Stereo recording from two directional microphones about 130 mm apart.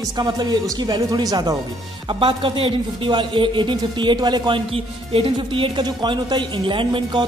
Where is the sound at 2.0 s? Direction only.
40° right (ahead or behind).